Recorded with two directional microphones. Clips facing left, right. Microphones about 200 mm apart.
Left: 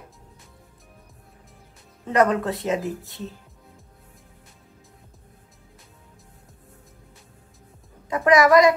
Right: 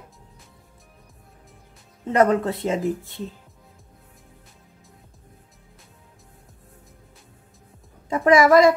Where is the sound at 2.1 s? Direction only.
25° right (ahead or behind).